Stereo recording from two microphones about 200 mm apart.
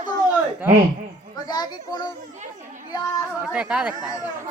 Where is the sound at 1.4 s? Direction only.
20° left (ahead or behind).